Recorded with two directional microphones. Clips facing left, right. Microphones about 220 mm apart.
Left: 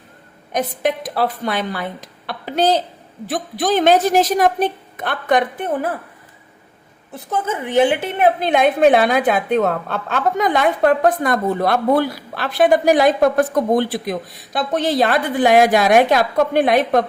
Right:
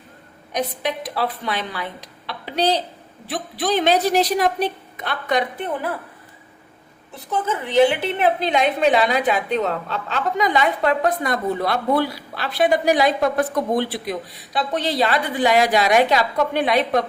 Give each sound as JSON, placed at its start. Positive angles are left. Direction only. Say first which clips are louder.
{"t": 0.5, "sound": "a woman's voice", "louder": "left 4 dB", "side_deg": 50}
{"t": 7.6, "sound": "a woman's voice", "louder": "even", "side_deg": 50}